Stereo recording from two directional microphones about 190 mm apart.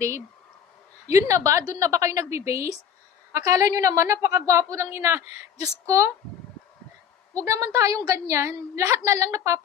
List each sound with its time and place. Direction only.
1.0 s a woman's voice: 15° right (ahead or behind)
7.4 s a woman's voice: 15° right (ahead or behind)